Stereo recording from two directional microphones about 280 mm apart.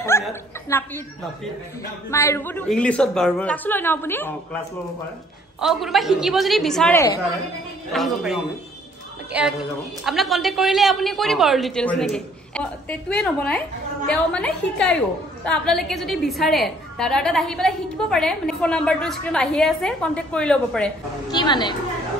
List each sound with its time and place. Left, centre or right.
0.2 s chuckle: centre
2.0 s a woman's voice: centre
5.6 s a man's voice: centre
21.3 s a woman's voice: centre